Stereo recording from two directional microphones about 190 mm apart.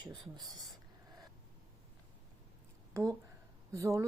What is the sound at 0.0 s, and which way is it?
Speech, 20° right (ahead or behind).